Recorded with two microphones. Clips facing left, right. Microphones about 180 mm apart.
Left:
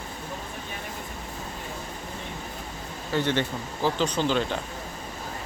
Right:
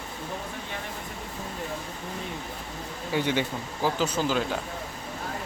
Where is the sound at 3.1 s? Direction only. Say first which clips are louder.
Left 1 dB; 10° right (ahead or behind).